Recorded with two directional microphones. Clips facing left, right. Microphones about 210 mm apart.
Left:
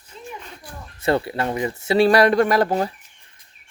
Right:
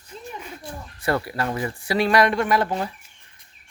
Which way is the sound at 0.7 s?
25° right (ahead or behind).